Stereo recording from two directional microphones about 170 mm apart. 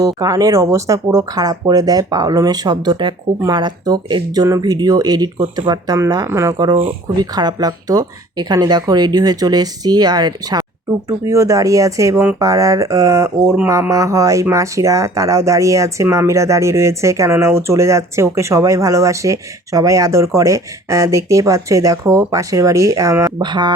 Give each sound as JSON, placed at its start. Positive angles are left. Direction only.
{"t": 0.0, "sound": "speech", "side_deg": -20}